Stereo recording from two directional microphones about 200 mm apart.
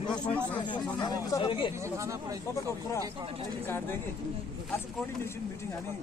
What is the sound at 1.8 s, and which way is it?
Speech, 15° right (ahead or behind).